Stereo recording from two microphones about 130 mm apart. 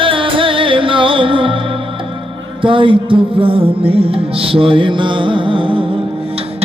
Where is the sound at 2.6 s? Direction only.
40° right (ahead or behind).